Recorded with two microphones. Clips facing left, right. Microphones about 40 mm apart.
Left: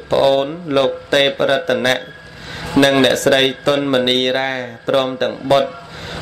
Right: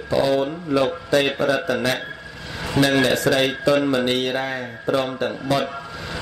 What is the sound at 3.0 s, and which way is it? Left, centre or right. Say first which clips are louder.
A man's voice: left 5 dB; left.